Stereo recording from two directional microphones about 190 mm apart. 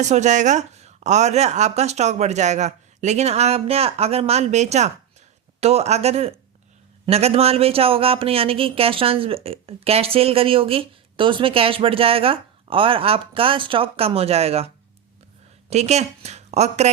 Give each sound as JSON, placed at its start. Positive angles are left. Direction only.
{"t": 0.0, "sound": "speech", "side_deg": -40}
{"t": 15.7, "sound": "speech", "side_deg": -35}